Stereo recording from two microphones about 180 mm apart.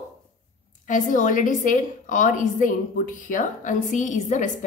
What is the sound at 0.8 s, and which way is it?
A woman's voice, 45° left (ahead or behind).